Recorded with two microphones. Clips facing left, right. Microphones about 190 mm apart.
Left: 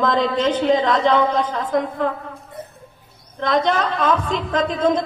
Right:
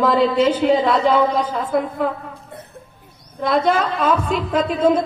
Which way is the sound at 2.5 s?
60° right (ahead or behind).